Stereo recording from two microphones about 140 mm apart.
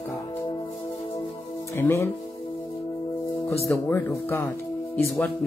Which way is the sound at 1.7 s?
15° left (ahead or behind).